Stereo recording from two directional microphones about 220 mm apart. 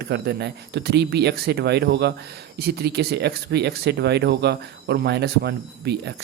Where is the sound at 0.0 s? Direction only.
50° right (ahead or behind).